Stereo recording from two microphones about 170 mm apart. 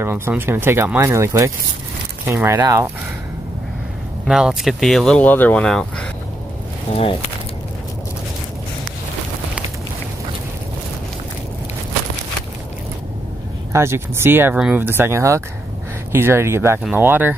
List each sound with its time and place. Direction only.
0.0 s speech: 15° right (ahead or behind)
4.3 s speech: 5° right (ahead or behind)
13.7 s speech: 15° right (ahead or behind)